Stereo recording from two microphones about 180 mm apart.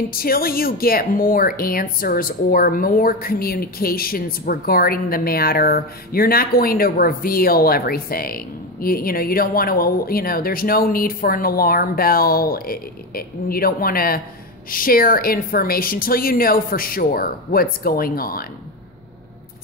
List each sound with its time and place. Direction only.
0.1 s a woman's voice: 55° left (ahead or behind)